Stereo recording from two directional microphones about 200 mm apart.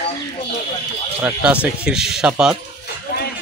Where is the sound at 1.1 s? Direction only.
5° right (ahead or behind).